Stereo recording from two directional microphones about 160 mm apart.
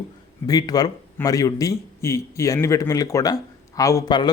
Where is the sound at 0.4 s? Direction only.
25° left (ahead or behind).